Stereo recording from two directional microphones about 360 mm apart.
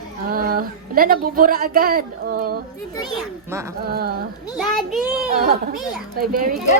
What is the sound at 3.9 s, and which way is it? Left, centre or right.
Speech, right.